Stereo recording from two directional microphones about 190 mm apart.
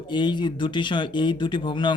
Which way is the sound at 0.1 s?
25° left (ahead or behind).